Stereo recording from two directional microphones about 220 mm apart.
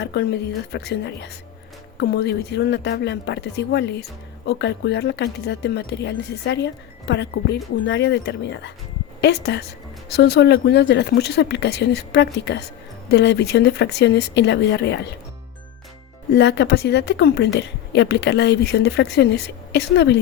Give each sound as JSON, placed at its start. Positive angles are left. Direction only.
{"t": 0.0, "sound": "a woman's voice", "side_deg": 50}
{"t": 16.3, "sound": "a woman's voice", "side_deg": 50}